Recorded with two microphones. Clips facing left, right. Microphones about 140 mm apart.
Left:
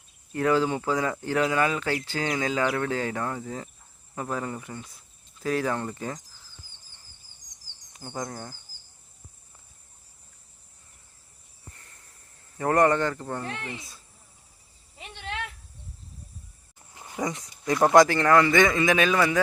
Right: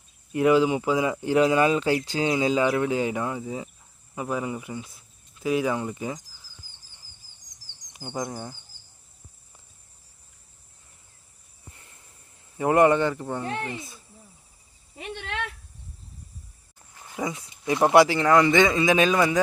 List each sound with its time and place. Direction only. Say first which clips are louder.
0.3 s speech: right 4 dB; 15° right (ahead or behind)
8.1 s speech: right 3 dB; 10° right (ahead or behind)
12.5 s speech: right 3 dB; 10° right (ahead or behind)
13.7 s speech: right 3 dB; centre (ahead or behind)
14.9 s cricket: right 3 dB; 60° right (ahead or behind)
16.9 s a sound: left 2 dB; 20° left (ahead or behind)
17.2 s speech: even; 5° right (ahead or behind)
17.5 s speech: even; 20° right (ahead or behind)